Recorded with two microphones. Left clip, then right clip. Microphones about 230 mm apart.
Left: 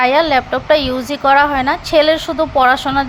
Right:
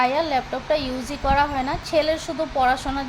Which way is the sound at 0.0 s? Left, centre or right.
Centre.